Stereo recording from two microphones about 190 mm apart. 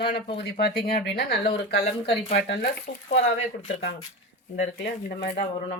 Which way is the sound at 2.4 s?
55° left (ahead or behind).